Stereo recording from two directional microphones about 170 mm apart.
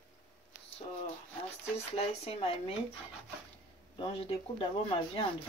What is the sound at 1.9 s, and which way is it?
Speech, 35° left (ahead or behind).